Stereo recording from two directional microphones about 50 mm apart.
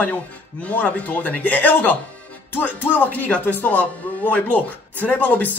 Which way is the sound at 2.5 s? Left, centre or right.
Left.